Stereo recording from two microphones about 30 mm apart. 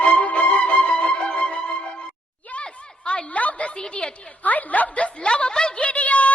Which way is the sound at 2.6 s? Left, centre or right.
Left.